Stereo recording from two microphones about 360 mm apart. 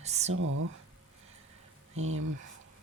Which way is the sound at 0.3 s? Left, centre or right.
Right.